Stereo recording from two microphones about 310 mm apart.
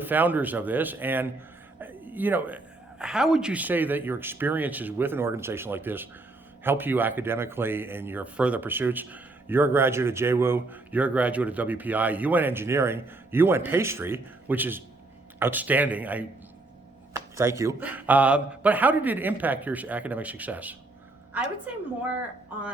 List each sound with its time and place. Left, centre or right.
0.0 s speech: centre
1.8 s a sound: centre
3.0 s speech: centre